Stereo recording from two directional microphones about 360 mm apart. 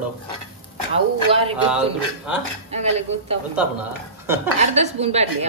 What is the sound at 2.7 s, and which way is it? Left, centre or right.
Speech, centre.